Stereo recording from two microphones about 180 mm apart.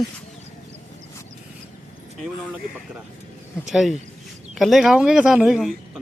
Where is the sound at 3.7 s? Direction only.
Centre (ahead or behind).